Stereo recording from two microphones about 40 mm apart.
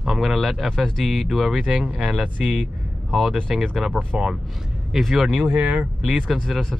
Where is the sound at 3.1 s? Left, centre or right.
Centre.